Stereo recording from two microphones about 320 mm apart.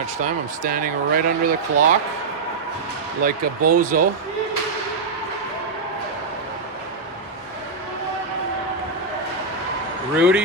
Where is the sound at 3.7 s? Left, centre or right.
Right.